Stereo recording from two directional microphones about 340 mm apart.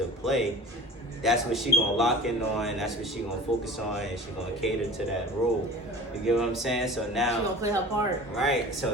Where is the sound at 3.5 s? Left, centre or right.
Centre.